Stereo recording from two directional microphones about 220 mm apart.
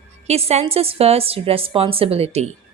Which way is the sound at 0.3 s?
30° right (ahead or behind).